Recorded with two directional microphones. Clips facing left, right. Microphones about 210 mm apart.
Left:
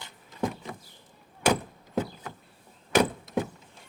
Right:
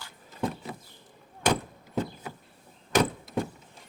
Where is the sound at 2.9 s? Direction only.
5° left (ahead or behind).